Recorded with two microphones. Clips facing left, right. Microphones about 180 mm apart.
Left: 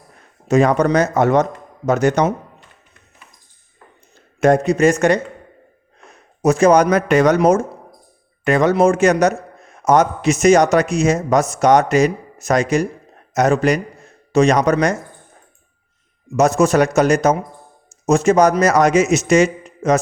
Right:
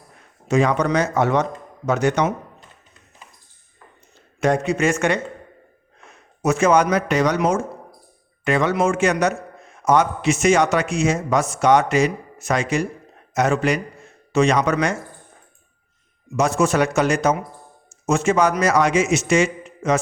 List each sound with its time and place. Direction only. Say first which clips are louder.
0.4 s speech: left 4 dB; 40° left (ahead or behind)
4.4 s speech: left 6 dB; 45° left (ahead or behind)
6.4 s speech: left 4 dB; 40° left (ahead or behind)
16.3 s speech: left 5 dB; 40° left (ahead or behind)